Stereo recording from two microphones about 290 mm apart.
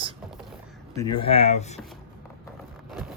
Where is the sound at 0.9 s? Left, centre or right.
Centre.